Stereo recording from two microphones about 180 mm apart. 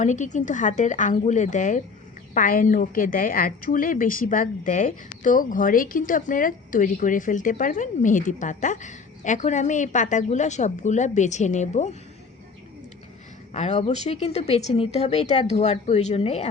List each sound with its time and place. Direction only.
0.0 s a woman's voice: 45° left (ahead or behind)
13.5 s speech: 40° left (ahead or behind)